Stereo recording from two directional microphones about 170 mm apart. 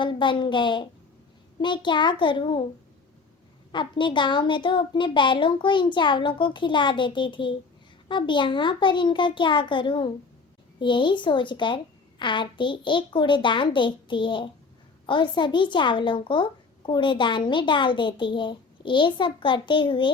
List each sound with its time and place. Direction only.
0.0 s speech: 30° left (ahead or behind)
3.7 s speech: 30° left (ahead or behind)